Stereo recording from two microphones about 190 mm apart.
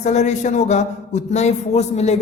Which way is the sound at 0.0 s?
35° left (ahead or behind).